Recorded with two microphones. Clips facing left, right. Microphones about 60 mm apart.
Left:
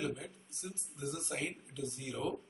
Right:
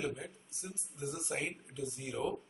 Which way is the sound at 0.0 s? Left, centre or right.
Centre.